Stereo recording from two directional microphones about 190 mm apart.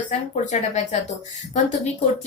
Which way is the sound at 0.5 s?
35° left (ahead or behind).